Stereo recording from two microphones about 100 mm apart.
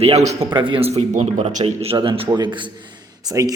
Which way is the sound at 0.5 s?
55° right (ahead or behind).